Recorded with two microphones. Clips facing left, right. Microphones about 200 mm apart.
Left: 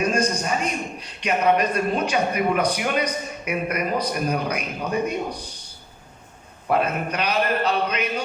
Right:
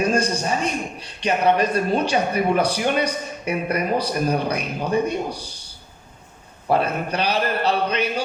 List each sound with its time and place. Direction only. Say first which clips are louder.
0.1 s a man's voice: right 2 dB; 30° right (ahead or behind)
6.7 s a man's voice: right 1 dB; 30° right (ahead or behind)